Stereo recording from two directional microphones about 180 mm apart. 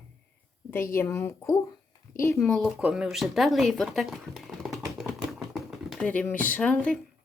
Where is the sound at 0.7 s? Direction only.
15° left (ahead or behind).